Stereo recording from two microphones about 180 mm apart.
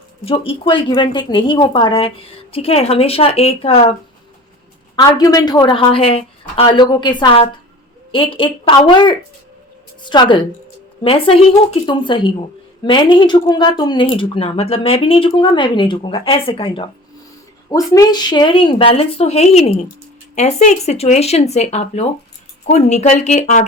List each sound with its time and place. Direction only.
0.3 s a woman's voice: 30° left (ahead or behind)
4.9 s a woman's voice: 20° left (ahead or behind)
17.7 s a woman's voice: 20° left (ahead or behind); by 23.6 s 40° left (ahead or behind)